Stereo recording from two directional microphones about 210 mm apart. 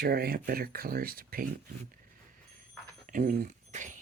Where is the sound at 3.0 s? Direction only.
40° right (ahead or behind).